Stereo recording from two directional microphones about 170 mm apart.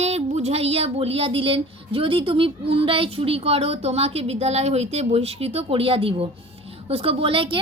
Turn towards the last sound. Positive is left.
turn(degrees=-30)  # may be behind; listen again after turning